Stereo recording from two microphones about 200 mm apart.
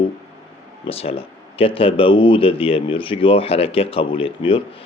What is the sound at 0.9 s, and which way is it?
Speech, 30° left (ahead or behind).